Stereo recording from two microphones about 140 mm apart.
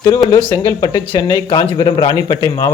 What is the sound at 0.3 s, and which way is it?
Speech, 30° left (ahead or behind).